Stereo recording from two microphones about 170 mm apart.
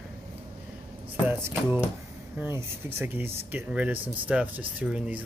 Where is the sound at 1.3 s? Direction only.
15° right (ahead or behind).